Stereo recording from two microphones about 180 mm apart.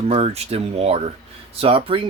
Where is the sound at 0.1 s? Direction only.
35° right (ahead or behind).